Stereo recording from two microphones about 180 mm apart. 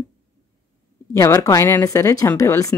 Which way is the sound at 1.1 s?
15° left (ahead or behind).